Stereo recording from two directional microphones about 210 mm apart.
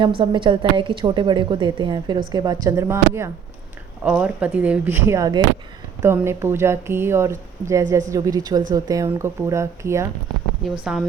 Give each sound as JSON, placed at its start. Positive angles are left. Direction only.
{"t": 0.2, "sound": "a woman's voice", "side_deg": -25}